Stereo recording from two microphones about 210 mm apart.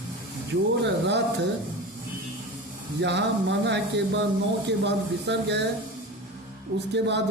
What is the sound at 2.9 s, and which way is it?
Speech, 55° right (ahead or behind).